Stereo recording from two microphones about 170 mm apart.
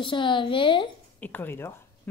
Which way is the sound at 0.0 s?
30° left (ahead or behind).